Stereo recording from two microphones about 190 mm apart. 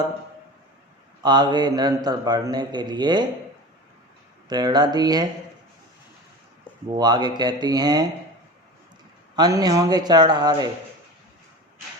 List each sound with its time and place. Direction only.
1.2 s a man's voice: 25° right (ahead or behind)
4.4 s a man's voice: 20° right (ahead or behind)
6.9 s a man's voice: 20° right (ahead or behind)
9.3 s a man's voice: 20° right (ahead or behind)